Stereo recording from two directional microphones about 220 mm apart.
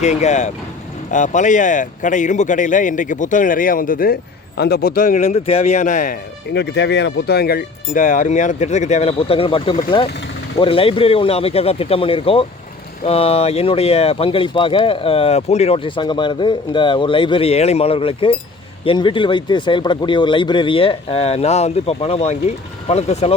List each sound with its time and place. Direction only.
0.0 s speech: 30° left (ahead or behind)
6.5 s speech: 50° left (ahead or behind); by 23.3 s 30° left (ahead or behind)